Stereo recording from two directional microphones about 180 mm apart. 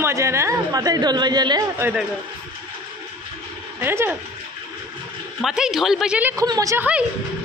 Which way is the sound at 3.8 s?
15° right (ahead or behind).